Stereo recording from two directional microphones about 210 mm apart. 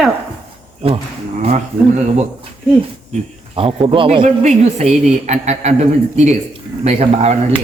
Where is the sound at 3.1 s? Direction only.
25° right (ahead or behind).